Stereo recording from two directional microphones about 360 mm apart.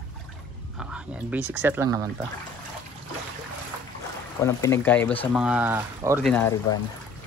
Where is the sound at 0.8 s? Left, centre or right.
Centre.